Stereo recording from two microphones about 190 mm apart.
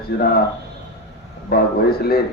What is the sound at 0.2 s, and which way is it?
Speech, 55° left (ahead or behind).